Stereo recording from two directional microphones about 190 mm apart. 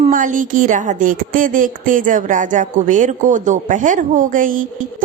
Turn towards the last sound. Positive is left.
turn(degrees=-45)  # may be behind; listen again after turning